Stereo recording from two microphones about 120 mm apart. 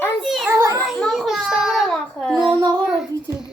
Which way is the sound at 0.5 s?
25° right (ahead or behind).